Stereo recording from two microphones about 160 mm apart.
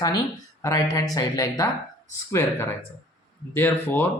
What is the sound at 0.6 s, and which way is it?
Speech, 20° left (ahead or behind).